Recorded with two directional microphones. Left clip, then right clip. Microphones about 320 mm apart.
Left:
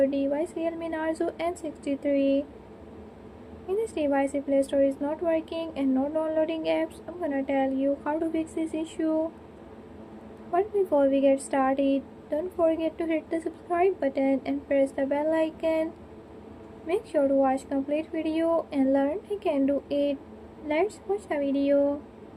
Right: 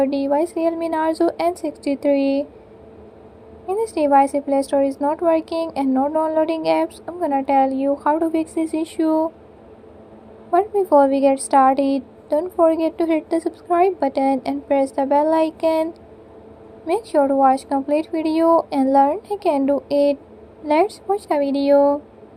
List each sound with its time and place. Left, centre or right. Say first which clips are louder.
0.0 s a woman's voice: right 7 dB; right
3.7 s a woman's voice: right 9 dB; right
10.5 s a woman's voice: right 9 dB; right